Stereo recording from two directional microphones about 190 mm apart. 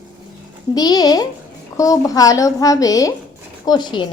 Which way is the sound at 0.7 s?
20° left (ahead or behind).